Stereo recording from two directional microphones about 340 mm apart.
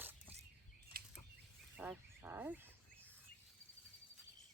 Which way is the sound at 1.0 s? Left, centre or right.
Right.